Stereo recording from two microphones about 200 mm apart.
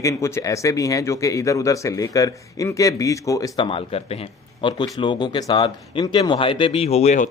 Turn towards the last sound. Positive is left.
turn(degrees=35)  # may be behind; listen again after turning